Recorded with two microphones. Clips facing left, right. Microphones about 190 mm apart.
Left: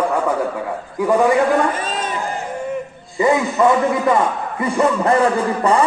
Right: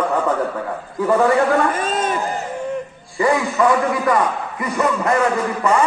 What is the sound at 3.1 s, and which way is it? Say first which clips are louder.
A man's voice: left 2 dB; 20° left (ahead or behind).